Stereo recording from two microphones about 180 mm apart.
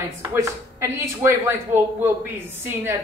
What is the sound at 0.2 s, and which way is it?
Speech, 15° right (ahead or behind).